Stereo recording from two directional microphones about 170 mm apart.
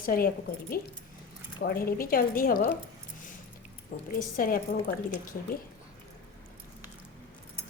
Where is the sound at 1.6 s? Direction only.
60° left (ahead or behind).